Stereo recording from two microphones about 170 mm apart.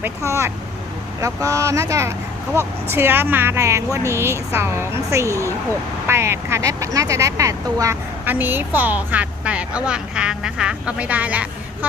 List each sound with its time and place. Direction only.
0.0 s speech: 15° right (ahead or behind)